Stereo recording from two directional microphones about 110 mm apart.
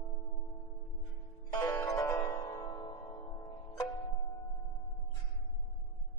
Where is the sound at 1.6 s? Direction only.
25° left (ahead or behind).